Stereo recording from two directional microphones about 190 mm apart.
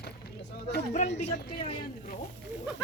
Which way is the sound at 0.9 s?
40° left (ahead or behind).